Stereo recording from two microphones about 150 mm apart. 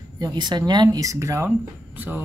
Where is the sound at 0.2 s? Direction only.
30° right (ahead or behind).